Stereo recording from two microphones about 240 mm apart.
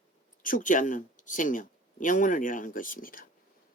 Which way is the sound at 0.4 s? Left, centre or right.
Left.